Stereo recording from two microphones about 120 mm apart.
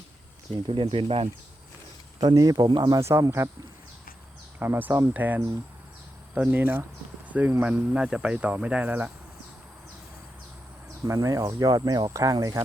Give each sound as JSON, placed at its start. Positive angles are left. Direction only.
{"t": 0.7, "sound": "speech", "side_deg": -50}
{"t": 2.2, "sound": "speech", "side_deg": -35}
{"t": 4.6, "sound": "speech", "side_deg": -20}
{"t": 11.0, "sound": "speech", "side_deg": -30}